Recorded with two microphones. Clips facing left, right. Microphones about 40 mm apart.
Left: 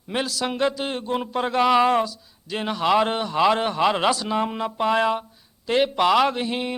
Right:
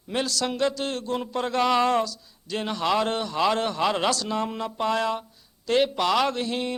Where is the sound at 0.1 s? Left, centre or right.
Centre.